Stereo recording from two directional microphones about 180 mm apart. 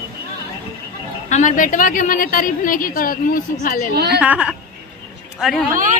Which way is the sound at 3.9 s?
65° right (ahead or behind).